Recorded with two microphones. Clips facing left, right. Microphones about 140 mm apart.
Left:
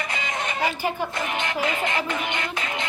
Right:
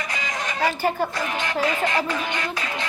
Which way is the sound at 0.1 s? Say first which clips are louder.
Even; 25° left (ahead or behind).